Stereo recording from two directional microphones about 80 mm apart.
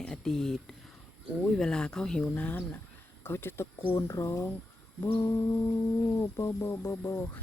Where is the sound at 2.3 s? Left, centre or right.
Centre.